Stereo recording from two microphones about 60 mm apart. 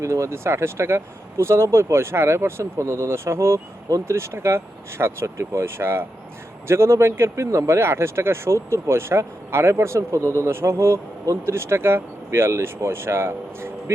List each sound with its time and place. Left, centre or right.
0.0 s speech: right